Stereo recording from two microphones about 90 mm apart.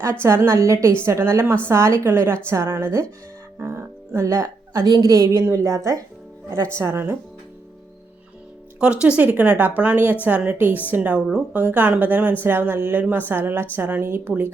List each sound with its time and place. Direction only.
0.0 s a woman's voice: 30° right (ahead or behind)
3.6 s music: 30° right (ahead or behind)
4.9 s a woman's voice: 40° right (ahead or behind)
8.8 s a woman's voice: 10° right (ahead or behind)